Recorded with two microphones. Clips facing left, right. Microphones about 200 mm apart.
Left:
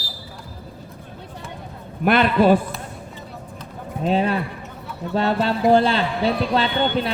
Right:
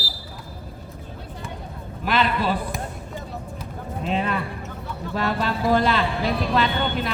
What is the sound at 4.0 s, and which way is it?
A man's voice, 35° left (ahead or behind).